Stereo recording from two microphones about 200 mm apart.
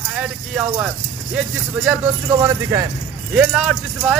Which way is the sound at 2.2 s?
15° right (ahead or behind).